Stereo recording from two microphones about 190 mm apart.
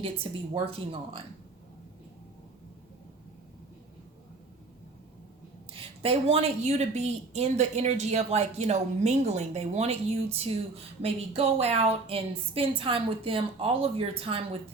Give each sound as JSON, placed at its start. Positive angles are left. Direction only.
{"t": 0.5, "sound": "a woman's voice", "side_deg": -25}
{"t": 5.7, "sound": "a woman's voice", "side_deg": -30}